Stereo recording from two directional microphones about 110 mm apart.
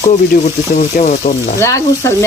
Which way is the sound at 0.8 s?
90° left.